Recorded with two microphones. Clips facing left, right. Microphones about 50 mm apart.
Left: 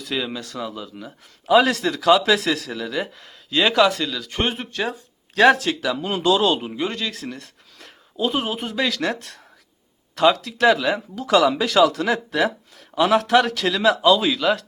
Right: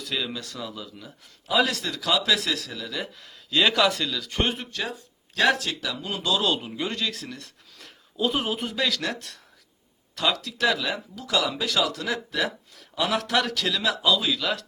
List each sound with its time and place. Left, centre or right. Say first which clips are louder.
0.0 s speech: left 4 dB; left
1.5 s speech: left 7 dB; left
3.5 s speech: left 4 dB; centre; by 6.4 s left
6.4 s speech: left 5 dB; left
6.8 s speech: left 3 dB; centre
9.1 s speech: left 3 dB; left
11.1 s speech: left 11 dB; left
12.1 s speech: left 6 dB; left
13.1 s speech: left 8 dB; left